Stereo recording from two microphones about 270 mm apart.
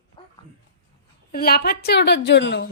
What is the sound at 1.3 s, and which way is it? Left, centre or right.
A woman's voice, left.